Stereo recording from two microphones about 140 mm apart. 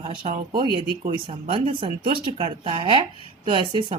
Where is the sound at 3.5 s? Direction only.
40° right (ahead or behind).